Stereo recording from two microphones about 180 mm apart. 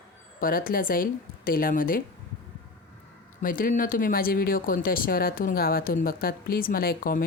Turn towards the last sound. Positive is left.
turn(degrees=55)  # may be behind; listen again after turning